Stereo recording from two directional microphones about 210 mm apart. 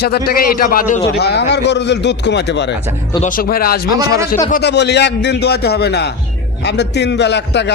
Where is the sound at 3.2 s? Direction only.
45° left (ahead or behind).